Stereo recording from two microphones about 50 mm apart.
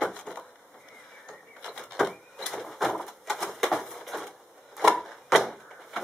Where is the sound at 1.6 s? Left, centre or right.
Centre.